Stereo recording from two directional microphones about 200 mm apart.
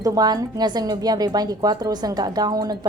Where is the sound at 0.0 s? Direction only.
20° right (ahead or behind).